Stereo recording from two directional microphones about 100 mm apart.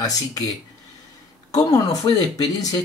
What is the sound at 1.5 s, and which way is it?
Speech, 40° left (ahead or behind).